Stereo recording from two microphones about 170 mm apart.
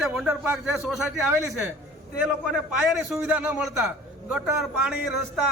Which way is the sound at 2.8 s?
10° right (ahead or behind).